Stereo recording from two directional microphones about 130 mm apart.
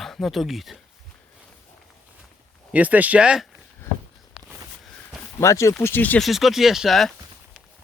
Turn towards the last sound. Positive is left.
turn(degrees=0)  # may be behind; listen again after turning